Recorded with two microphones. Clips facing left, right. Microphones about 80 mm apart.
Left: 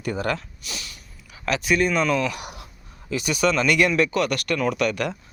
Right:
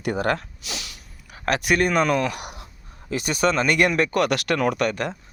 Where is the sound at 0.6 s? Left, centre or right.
Right.